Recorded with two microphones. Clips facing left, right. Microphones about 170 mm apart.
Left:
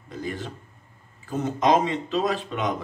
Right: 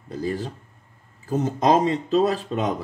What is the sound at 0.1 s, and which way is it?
Speech, 35° right (ahead or behind).